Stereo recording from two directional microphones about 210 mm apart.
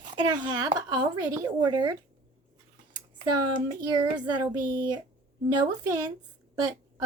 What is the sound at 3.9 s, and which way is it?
A woman's voice, 20° right (ahead or behind).